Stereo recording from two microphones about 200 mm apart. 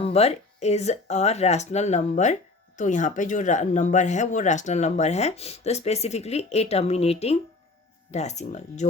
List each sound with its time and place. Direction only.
0.0 s speech: 30° left (ahead or behind)